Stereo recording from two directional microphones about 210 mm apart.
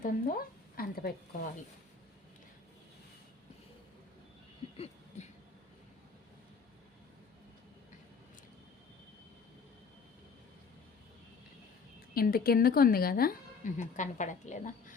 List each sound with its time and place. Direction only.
0.0 s a woman's voice: 45° left (ahead or behind)
4.8 s a sound: 35° left (ahead or behind)
12.1 s speech: 45° left (ahead or behind)